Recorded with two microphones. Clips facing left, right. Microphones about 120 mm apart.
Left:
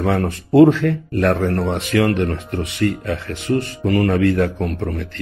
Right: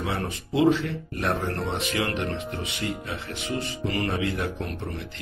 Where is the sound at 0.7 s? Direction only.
90° left.